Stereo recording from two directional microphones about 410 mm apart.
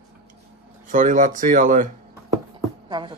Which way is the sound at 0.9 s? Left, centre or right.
Centre.